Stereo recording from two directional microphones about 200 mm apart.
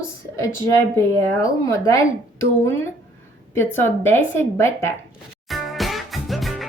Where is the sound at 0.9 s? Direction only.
15° left (ahead or behind).